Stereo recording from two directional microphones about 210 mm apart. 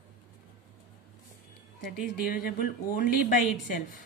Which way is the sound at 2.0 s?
40° left (ahead or behind).